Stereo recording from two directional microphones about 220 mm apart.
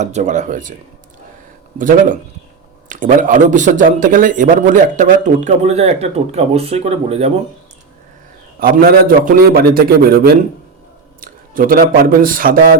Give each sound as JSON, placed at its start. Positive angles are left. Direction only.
{"t": 0.0, "sound": "a man's voice", "side_deg": -30}
{"t": 1.8, "sound": "a man's voice", "side_deg": -35}
{"t": 8.5, "sound": "a man's voice", "side_deg": -40}